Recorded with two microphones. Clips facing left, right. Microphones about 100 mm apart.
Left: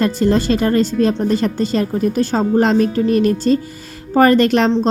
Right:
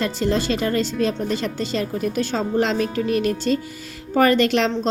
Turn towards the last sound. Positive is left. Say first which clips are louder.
# left 5 dB
turn(degrees=45)  # may be behind; listen again after turning